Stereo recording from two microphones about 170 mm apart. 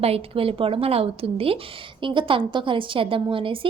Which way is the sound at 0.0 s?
35° right (ahead or behind).